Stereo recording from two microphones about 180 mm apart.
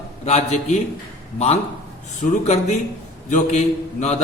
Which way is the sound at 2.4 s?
40° left (ahead or behind).